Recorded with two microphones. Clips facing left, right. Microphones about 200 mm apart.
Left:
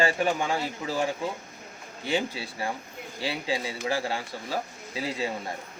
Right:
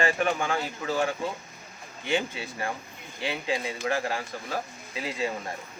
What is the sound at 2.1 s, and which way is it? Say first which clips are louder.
Speech: even; 35° left (ahead or behind).